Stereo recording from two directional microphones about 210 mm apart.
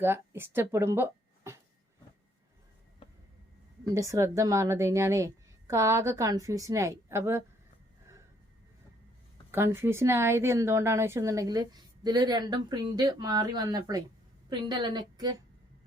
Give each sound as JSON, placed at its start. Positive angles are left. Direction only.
{"t": 0.0, "sound": "speech", "side_deg": -10}
{"t": 3.9, "sound": "a woman's voice", "side_deg": -15}
{"t": 9.5, "sound": "a woman's voice", "side_deg": -10}